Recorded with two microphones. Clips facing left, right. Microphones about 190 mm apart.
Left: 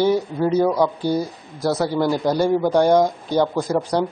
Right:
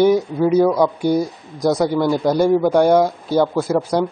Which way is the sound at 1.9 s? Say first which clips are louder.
Right 2 dB; 5° left (ahead or behind).